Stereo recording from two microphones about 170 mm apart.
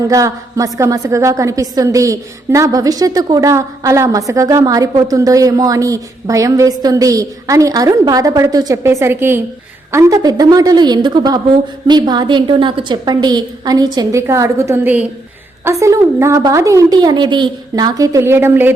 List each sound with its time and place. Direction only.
0.1 s a woman's voice: 20° right (ahead or behind)